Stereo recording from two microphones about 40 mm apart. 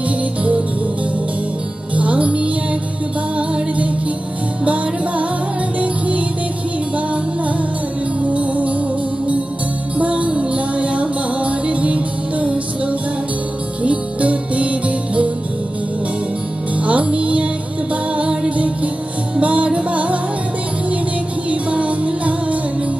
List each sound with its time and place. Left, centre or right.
0.4 s music: right
2.0 s music: right
5.8 s music: right
8.2 s music: right
9.9 s music: right
16.7 s music: right
21.5 s music: right